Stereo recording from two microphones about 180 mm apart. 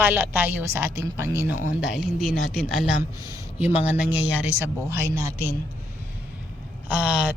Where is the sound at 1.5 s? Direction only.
45° left (ahead or behind).